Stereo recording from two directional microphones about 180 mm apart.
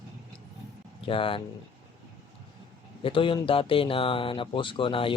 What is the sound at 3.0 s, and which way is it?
Speech, 30° left (ahead or behind).